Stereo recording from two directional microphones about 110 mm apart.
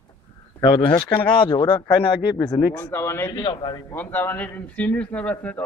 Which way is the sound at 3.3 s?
50° left (ahead or behind).